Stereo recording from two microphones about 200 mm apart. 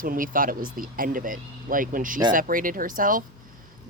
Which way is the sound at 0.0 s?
45° right (ahead or behind).